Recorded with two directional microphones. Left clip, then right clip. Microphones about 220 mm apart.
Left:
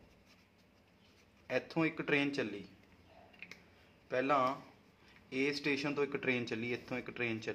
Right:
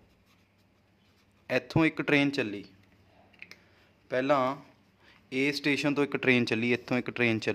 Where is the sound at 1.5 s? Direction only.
45° right (ahead or behind).